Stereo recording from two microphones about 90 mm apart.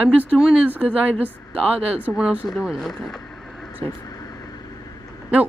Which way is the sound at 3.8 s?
40° left (ahead or behind).